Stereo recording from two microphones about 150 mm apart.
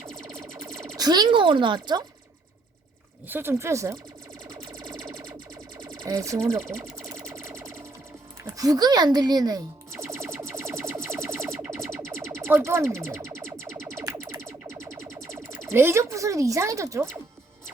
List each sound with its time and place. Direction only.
0.0 s music: 5° left (ahead or behind)
0.7 s a sound: 5° left (ahead or behind)
0.9 s speech: 25° right (ahead or behind)
3.2 s speech: 15° right (ahead or behind)
4.8 s music: 25° right (ahead or behind)
6.1 s speech: 20° right (ahead or behind)
7.3 s music: 20° right (ahead or behind)